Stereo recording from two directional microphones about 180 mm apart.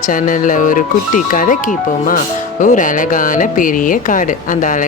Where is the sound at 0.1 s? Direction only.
45° left (ahead or behind).